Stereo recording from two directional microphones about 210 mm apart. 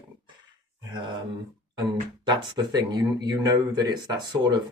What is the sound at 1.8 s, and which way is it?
Speech, 20° right (ahead or behind).